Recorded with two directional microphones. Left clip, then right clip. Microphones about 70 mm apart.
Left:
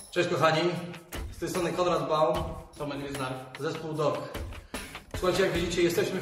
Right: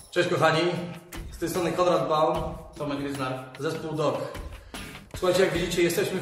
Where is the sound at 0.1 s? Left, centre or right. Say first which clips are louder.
Right 2 dB; centre.